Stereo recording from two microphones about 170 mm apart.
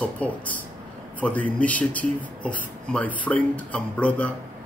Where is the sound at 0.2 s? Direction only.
5° left (ahead or behind).